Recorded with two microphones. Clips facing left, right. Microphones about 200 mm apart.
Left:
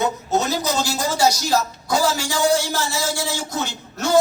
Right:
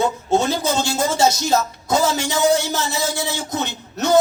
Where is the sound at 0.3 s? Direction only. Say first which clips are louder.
Right 3 dB; 30° right (ahead or behind).